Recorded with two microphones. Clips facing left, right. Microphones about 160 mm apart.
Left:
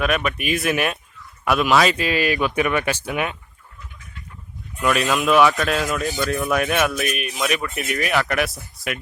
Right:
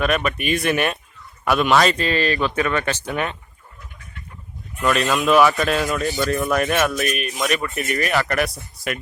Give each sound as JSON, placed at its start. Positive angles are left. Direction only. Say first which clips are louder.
{"t": 0.0, "sound": "speech", "louder": "right 1 dB", "side_deg": 0}
{"t": 4.8, "sound": "speech", "louder": "even", "side_deg": 0}